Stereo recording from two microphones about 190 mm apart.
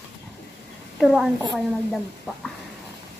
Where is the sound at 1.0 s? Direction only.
Centre (ahead or behind).